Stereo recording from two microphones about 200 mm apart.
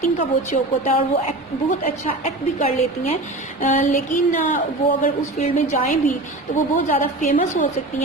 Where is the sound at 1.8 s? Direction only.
35° left (ahead or behind).